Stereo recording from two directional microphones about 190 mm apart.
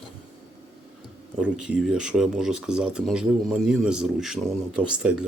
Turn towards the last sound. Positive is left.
turn(degrees=-5)  # may be behind; listen again after turning